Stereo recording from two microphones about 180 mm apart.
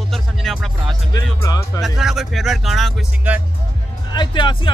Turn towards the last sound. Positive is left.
turn(degrees=25)  # may be behind; listen again after turning